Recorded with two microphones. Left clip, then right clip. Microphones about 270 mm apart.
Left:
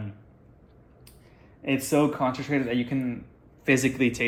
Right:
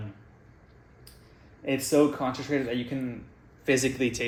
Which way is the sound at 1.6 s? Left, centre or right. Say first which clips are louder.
Even; left.